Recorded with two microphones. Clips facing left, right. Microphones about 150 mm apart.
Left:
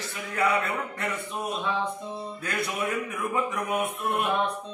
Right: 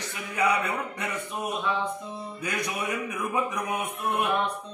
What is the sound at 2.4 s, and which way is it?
Speech, 15° right (ahead or behind).